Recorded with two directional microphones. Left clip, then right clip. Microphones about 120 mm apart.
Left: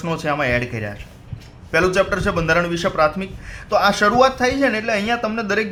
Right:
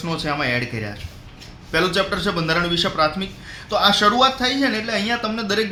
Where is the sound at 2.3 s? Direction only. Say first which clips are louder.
Left 1 dB; 35° left (ahead or behind).